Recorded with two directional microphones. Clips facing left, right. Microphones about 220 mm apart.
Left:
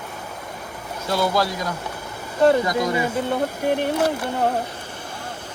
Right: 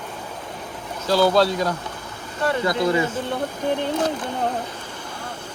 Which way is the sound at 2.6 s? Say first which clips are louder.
Right 1 dB; 10° left (ahead or behind).